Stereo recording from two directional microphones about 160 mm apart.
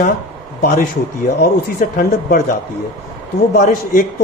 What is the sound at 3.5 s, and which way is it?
Speech, 60° left (ahead or behind).